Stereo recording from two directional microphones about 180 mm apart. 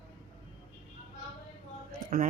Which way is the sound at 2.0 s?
45° right (ahead or behind).